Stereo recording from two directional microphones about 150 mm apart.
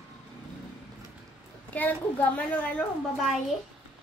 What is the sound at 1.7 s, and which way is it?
A woman's voice, 10° left (ahead or behind).